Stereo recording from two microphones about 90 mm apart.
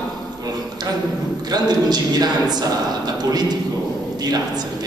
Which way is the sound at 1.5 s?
45° right (ahead or behind).